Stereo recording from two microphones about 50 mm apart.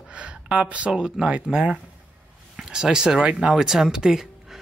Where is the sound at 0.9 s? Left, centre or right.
Centre.